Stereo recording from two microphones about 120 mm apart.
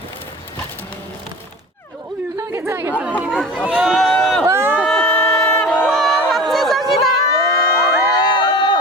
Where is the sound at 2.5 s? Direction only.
20° right (ahead or behind).